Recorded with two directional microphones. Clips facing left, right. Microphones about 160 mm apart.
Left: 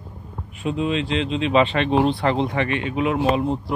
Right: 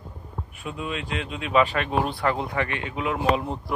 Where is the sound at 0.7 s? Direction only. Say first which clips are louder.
Left 9 dB; 25° left (ahead or behind).